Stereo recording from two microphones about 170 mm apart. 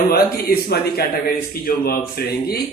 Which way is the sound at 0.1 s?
65° left (ahead or behind).